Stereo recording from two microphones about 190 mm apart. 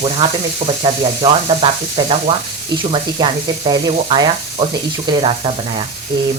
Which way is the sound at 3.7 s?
20° right (ahead or behind).